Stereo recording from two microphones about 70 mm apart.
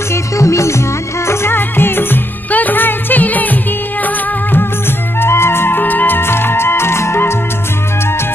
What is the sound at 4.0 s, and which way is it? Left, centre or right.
Music of bollywood, left.